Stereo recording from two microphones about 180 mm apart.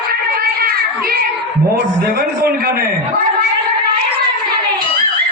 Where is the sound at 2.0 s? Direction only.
50° right (ahead or behind).